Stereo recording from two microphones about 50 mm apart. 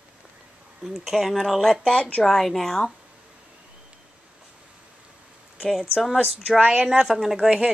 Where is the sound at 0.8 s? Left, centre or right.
Centre.